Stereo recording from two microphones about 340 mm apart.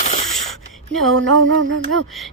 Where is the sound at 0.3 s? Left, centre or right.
Centre.